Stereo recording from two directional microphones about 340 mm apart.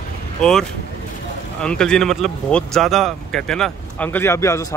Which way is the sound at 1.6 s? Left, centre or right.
Centre.